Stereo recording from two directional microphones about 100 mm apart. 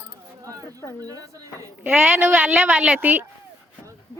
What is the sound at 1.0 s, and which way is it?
Speech, 35° right (ahead or behind).